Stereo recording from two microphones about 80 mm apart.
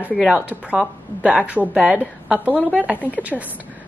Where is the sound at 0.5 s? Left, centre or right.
Centre.